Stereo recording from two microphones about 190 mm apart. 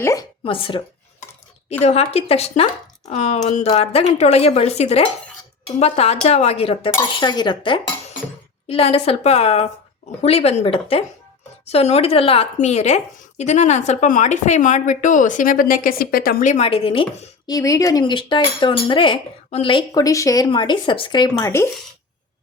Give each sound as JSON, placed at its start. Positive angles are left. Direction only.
{"t": 0.0, "sound": "speech", "side_deg": 15}
{"t": 0.4, "sound": "speech", "side_deg": 25}
{"t": 1.8, "sound": "speech", "side_deg": 35}